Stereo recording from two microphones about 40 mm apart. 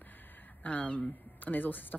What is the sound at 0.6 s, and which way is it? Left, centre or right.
Speech, left.